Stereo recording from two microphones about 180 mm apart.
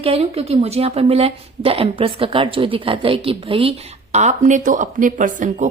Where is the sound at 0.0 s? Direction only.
35° right (ahead or behind).